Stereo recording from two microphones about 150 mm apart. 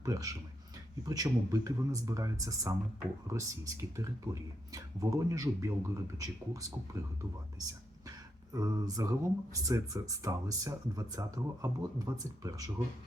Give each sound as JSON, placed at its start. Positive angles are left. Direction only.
{"t": 0.0, "sound": "speech", "side_deg": -20}
{"t": 8.5, "sound": "speech", "side_deg": -25}